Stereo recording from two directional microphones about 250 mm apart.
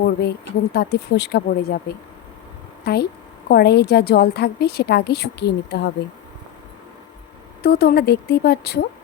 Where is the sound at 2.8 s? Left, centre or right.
Left.